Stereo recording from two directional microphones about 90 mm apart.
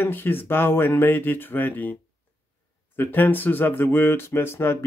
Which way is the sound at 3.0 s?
20° left (ahead or behind).